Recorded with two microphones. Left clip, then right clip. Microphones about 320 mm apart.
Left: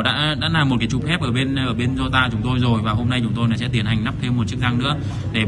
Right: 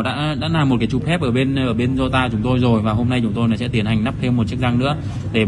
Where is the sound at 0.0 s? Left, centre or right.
Centre.